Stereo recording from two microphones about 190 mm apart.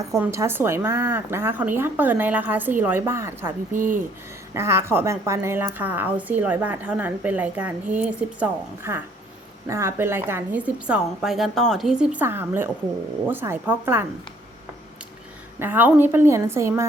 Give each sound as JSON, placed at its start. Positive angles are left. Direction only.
{"t": 0.3, "sound": "a woman's voice", "side_deg": -15}
{"t": 3.7, "sound": "speech", "side_deg": -45}
{"t": 4.5, "sound": "a woman's voice", "side_deg": -15}
{"t": 15.5, "sound": "a woman's voice", "side_deg": -10}